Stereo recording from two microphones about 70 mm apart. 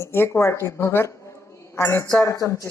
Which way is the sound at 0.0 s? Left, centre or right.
Left.